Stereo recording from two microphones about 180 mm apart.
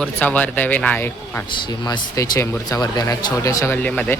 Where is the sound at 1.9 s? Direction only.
20° left (ahead or behind).